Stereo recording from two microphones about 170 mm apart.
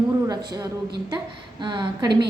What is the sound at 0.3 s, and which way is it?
A woman's voice, 20° right (ahead or behind).